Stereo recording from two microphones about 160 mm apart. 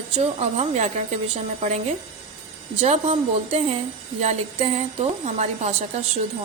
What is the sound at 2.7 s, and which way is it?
A woman's voice, 40° right (ahead or behind).